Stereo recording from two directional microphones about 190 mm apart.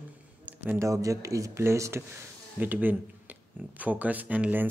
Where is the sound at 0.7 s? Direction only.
15° right (ahead or behind).